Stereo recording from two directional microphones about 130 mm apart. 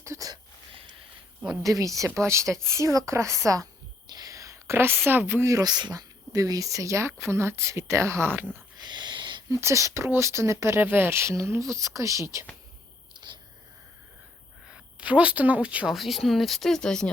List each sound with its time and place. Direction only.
0.0 s a sound: 25° right (ahead or behind)
1.6 s speech: 25° right (ahead or behind)
8.8 s a sound: 35° right (ahead or behind)
9.5 s speech: 20° right (ahead or behind)
13.1 s whispering: 35° right (ahead or behind)
14.9 s speech: 10° right (ahead or behind)